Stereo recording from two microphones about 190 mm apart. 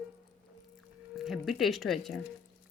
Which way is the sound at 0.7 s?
Centre (ahead or behind).